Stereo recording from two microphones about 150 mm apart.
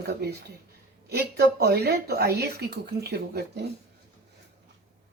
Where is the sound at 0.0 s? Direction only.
90° right.